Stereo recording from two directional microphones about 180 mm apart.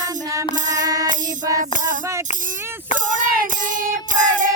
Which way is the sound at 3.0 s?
45° right (ahead or behind).